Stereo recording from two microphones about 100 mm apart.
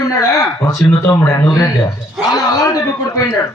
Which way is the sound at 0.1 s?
35° left (ahead or behind).